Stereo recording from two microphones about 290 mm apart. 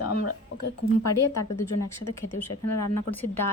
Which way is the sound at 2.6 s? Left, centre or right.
Left.